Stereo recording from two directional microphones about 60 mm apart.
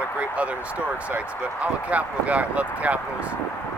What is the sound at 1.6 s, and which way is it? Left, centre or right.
Speech, right.